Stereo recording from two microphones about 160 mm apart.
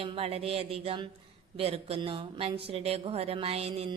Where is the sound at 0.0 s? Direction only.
35° right (ahead or behind).